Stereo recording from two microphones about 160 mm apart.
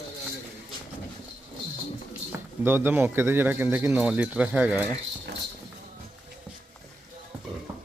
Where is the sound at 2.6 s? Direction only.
15° right (ahead or behind).